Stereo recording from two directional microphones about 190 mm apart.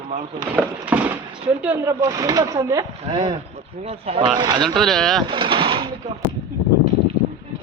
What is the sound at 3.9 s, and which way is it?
Speech, 30° right (ahead or behind).